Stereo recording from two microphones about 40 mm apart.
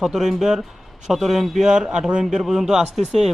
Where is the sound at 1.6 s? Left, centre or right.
Centre.